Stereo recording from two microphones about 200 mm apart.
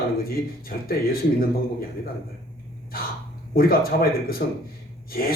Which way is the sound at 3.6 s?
45° left (ahead or behind).